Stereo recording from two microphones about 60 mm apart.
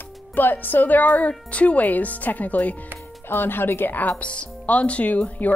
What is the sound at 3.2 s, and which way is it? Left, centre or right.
Speech, left.